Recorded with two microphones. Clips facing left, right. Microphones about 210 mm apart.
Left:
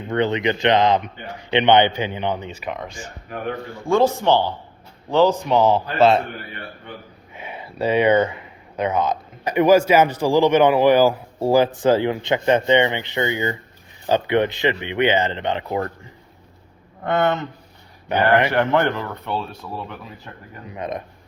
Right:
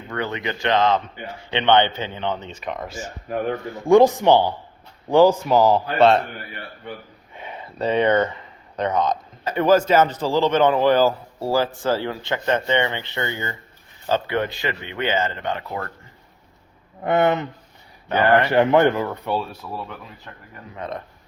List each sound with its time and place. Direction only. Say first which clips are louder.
0.1 s speech: left 7 dB; 20° left (ahead or behind); by 3.0 s centre (ahead or behind)
3.8 s speech: right 4 dB; 15° right (ahead or behind); by 6.2 s 5° left (ahead or behind)
7.3 s speech: left 2 dB; 10° left (ahead or behind)
17.0 s speech: right 1 dB; 15° right (ahead or behind)
18.1 s speech: even; 15° left (ahead or behind)
18.5 s speech: right 3 dB; 20° right (ahead or behind)
20.7 s speech: left 3 dB; 15° left (ahead or behind)